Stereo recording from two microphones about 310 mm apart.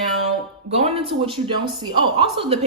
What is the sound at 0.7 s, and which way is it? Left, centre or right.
Speech, right.